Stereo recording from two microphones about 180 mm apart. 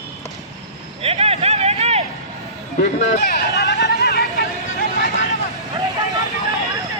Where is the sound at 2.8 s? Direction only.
45° left (ahead or behind).